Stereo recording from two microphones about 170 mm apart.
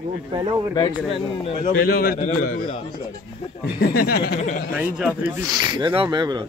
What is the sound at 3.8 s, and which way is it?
Speech, 65° left (ahead or behind).